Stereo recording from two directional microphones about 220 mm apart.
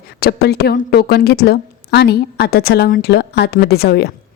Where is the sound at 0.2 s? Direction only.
45° left (ahead or behind).